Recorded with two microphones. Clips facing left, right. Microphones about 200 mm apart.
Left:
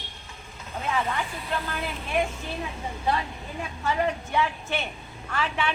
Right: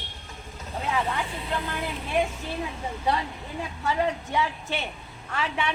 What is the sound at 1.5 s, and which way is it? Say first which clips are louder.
Speech: even; 15° right (ahead or behind).